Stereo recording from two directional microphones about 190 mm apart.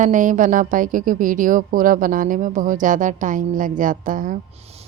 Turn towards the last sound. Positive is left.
turn(degrees=-45)  # may be behind; listen again after turning